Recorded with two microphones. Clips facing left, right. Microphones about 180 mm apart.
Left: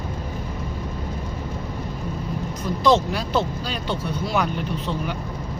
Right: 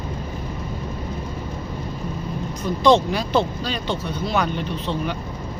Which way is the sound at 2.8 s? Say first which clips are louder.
Right 2 dB; centre (ahead or behind).